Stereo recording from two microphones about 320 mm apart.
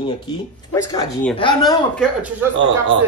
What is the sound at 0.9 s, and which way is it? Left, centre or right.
Speech, centre.